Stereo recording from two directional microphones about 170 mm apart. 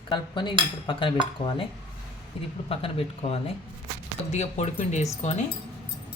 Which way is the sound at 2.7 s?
35° left (ahead or behind).